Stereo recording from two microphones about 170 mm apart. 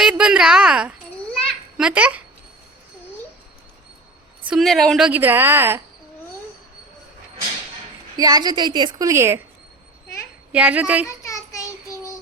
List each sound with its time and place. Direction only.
0.0 s a woman's voice: 5° right (ahead or behind)
1.3 s children playing: 5° left (ahead or behind)
1.9 s a woman's voice: 10° right (ahead or behind)
4.4 s a woman's voice: centre (ahead or behind)
8.1 s a woman's voice: 20° right (ahead or behind)
10.5 s a woman's voice: 10° right (ahead or behind)
11.3 s child singing: 20° left (ahead or behind)